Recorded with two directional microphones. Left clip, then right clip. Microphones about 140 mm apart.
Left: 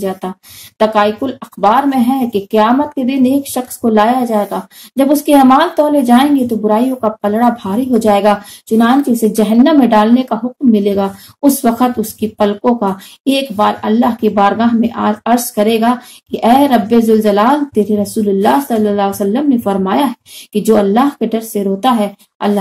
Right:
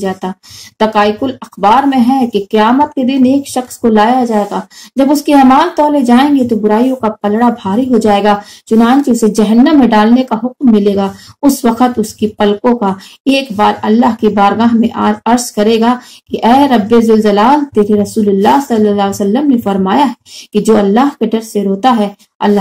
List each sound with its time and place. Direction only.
0.0 s speech: 15° right (ahead or behind)